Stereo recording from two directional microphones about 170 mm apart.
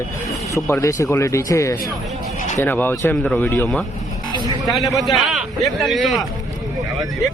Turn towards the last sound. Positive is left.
turn(degrees=0)  # may be behind; listen again after turning